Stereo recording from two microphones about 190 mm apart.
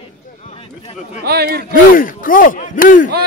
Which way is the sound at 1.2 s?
55° right (ahead or behind).